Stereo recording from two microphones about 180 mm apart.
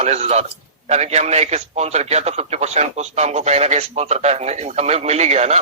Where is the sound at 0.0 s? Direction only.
35° right (ahead or behind).